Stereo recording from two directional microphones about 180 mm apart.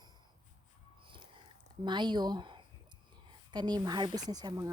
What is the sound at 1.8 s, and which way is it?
A woman's voice, 25° right (ahead or behind).